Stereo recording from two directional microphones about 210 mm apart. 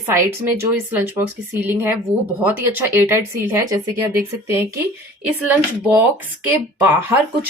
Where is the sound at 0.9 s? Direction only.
10° right (ahead or behind).